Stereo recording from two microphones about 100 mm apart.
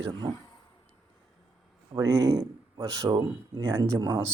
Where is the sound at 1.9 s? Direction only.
30° right (ahead or behind).